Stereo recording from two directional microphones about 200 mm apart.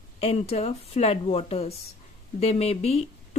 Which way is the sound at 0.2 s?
30° left (ahead or behind).